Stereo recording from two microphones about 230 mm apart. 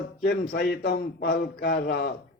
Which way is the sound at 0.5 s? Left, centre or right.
Left.